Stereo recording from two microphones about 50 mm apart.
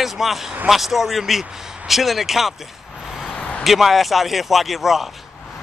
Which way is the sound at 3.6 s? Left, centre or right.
Centre.